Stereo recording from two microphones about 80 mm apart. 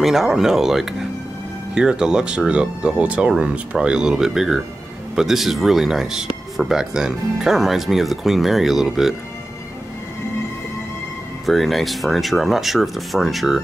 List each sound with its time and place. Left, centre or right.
0.0 s speech: centre
11.4 s speech: centre